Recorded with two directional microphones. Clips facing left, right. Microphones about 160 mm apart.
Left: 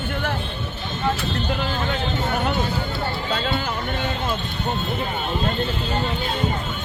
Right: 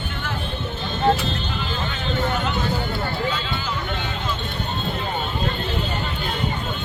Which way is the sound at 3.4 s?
55° left (ahead or behind).